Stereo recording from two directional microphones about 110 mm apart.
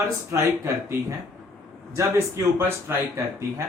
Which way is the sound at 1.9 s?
20° right (ahead or behind).